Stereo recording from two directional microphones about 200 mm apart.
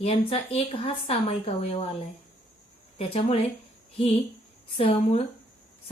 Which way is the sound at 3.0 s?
30° left (ahead or behind).